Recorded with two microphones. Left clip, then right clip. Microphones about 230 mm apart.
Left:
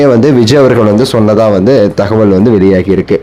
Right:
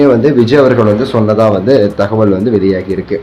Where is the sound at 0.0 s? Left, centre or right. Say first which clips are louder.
Left 2 dB; left.